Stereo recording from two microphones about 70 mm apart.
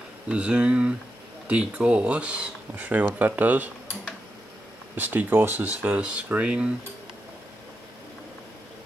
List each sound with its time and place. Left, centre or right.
0.3 s speech: centre
4.9 s speech: right